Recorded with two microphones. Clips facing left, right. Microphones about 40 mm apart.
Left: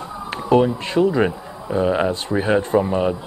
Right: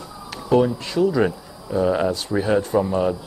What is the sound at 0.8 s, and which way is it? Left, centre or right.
Speech, left.